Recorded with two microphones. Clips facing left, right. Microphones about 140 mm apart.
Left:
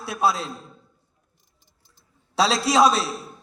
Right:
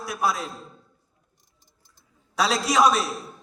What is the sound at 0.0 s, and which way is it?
Speech, 30° left (ahead or behind).